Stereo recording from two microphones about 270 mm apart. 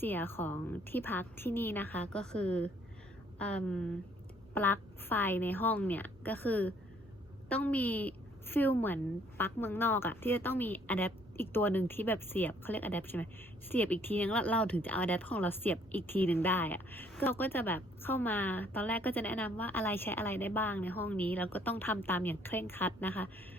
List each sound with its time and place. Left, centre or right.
0.0 s a woman's voice: centre